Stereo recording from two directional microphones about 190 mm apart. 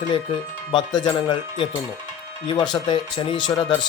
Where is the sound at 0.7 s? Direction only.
25° left (ahead or behind).